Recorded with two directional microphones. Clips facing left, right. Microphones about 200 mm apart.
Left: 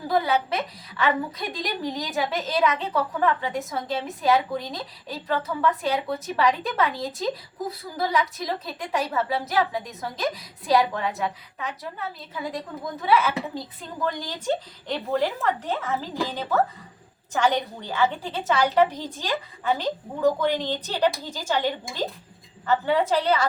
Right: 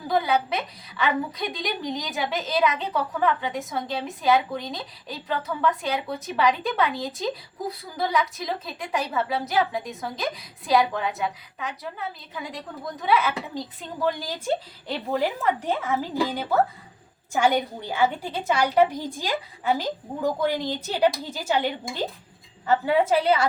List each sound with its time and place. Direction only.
0.1 s a woman's voice: centre (ahead or behind)